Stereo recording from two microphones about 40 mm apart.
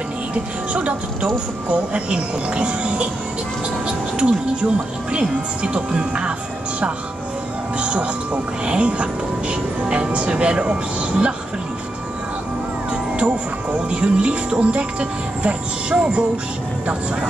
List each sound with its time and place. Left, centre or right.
0.3 s speech: right
4.2 s speech: right
7.8 s speech: right
12.9 s music: right
13.8 s speech: right